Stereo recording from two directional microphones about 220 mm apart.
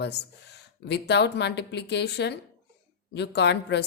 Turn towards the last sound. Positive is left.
turn(degrees=50)  # may be behind; listen again after turning